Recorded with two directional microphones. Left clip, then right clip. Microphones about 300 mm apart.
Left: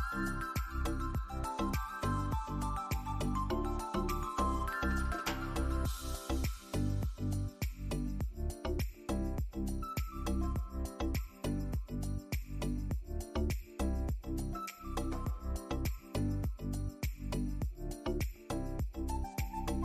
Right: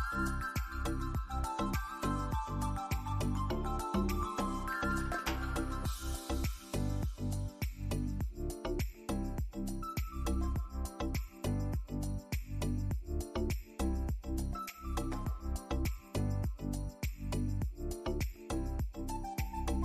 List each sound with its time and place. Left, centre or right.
0.1 s music: centre